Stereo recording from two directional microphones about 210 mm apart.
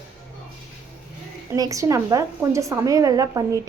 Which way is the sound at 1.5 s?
15° right (ahead or behind).